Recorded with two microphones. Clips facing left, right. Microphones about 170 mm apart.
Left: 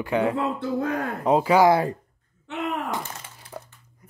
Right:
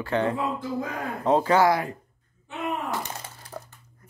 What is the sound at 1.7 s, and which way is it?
Speech, 30° left (ahead or behind).